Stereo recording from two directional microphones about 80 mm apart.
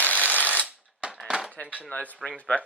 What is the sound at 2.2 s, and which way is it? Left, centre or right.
Speech, centre.